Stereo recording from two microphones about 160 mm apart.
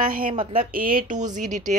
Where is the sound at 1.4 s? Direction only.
50° right (ahead or behind).